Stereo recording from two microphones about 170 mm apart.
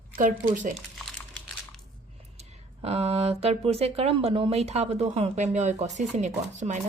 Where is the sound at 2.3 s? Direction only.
35° right (ahead or behind).